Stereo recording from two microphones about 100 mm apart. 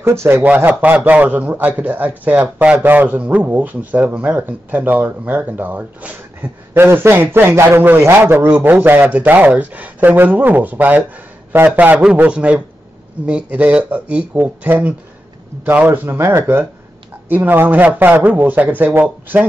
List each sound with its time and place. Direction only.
0.0 s a man's voice: 25° right (ahead or behind)